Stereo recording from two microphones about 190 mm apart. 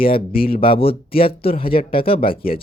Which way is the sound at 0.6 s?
25° left (ahead or behind).